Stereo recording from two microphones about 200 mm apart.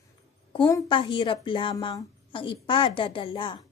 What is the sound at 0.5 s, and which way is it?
A woman's voice, 20° left (ahead or behind).